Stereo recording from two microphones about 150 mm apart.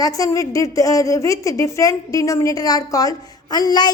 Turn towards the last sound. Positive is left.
turn(degrees=25)  # may be behind; listen again after turning